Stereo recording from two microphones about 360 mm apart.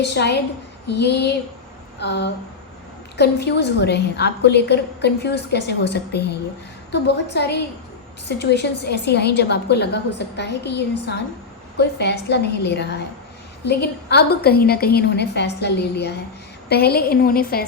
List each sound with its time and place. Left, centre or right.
0.0 s a woman's voice: left